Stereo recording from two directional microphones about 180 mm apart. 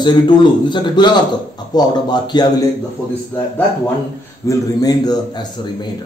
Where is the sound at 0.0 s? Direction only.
25° left (ahead or behind).